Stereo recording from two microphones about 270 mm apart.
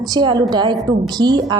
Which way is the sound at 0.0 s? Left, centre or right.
Centre.